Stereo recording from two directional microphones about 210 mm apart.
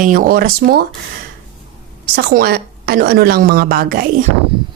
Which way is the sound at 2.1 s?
45° right (ahead or behind).